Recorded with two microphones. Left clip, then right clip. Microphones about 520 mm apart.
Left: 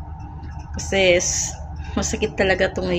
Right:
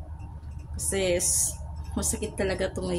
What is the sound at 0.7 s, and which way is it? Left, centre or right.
A woman's voice, right.